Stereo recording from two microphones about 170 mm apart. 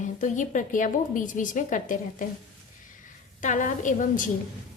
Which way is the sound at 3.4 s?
50° left (ahead or behind).